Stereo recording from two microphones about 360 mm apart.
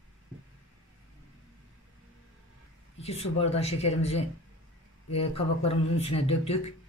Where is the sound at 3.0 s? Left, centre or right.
Centre.